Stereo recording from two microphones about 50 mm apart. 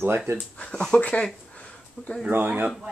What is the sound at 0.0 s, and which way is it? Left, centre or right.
Speech, right.